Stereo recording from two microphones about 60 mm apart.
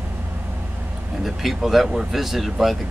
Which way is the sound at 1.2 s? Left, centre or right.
Centre.